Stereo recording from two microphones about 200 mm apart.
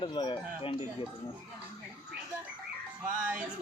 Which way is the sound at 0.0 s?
25° left (ahead or behind).